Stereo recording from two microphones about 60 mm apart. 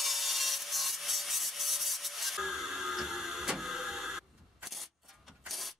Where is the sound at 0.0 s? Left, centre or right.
Centre.